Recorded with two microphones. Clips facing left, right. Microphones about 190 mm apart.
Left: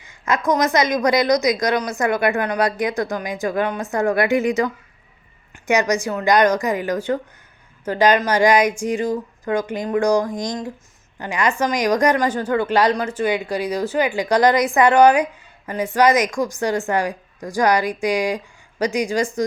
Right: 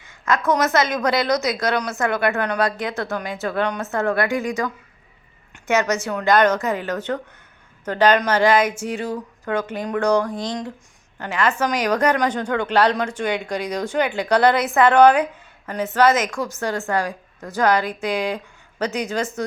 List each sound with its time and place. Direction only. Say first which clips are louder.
0.3 s a woman's voice: left 1 dB; 15° left (ahead or behind)